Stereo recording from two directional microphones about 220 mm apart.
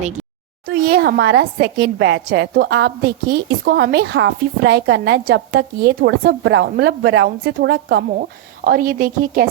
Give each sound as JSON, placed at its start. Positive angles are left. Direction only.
{"t": 0.8, "sound": "a woman's voice", "side_deg": -45}
{"t": 8.6, "sound": "a woman's voice", "side_deg": -40}